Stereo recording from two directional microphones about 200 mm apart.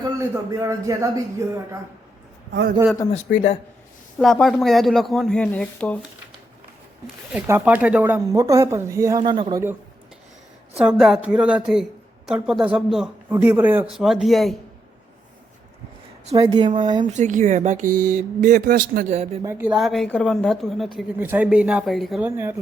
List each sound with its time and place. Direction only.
0.0 s speech: 15° right (ahead or behind)
2.5 s a man's voice: 55° right (ahead or behind)
3.2 s speech: 40° left (ahead or behind)
4.2 s a woman's voice: centre (ahead or behind)
7.3 s speech: 10° right (ahead or behind)
10.8 s a woman's voice: 5° right (ahead or behind)
16.3 s speech: 20° right (ahead or behind)
17.2 s speech: 40° right (ahead or behind)
19.4 s a woman's voice: 10° right (ahead or behind)